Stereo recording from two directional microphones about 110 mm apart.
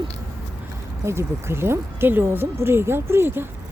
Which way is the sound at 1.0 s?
25° right (ahead or behind).